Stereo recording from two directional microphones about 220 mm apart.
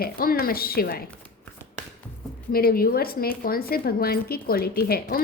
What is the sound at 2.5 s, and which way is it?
A woman's voice, 45° left (ahead or behind).